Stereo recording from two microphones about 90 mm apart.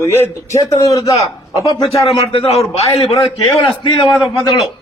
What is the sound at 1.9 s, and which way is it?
A man's voice, 90° left.